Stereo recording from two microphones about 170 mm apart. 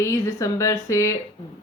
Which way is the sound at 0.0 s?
15° left (ahead or behind).